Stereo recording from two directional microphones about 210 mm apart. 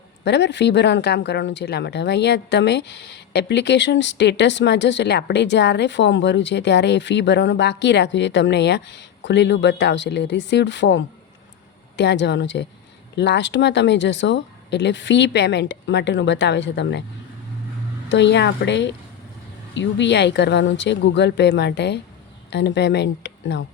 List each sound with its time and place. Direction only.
0.3 s speech: 55° left (ahead or behind)
18.1 s speech: 55° left (ahead or behind)